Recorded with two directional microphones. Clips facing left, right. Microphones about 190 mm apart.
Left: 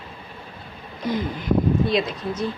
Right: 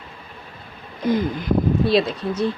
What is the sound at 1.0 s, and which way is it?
Speech, 50° right (ahead or behind).